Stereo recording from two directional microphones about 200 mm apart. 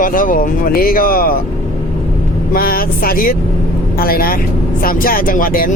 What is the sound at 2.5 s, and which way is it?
Speech, 45° left (ahead or behind).